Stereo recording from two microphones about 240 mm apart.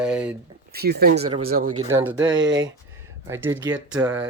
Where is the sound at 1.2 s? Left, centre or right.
Right.